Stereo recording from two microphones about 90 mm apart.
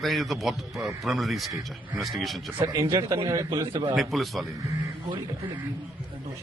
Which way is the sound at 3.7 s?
55° right (ahead or behind).